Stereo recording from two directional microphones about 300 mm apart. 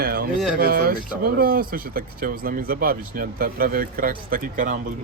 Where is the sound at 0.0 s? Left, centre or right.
Right.